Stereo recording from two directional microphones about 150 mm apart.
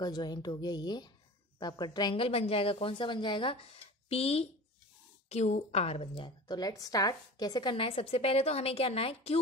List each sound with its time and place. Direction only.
0.0 s a woman's voice: 25° left (ahead or behind); by 6.0 s 45° left (ahead or behind)
6.1 s a woman's voice: 30° left (ahead or behind)